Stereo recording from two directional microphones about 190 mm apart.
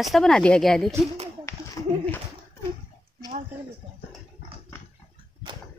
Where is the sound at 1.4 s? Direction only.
15° left (ahead or behind).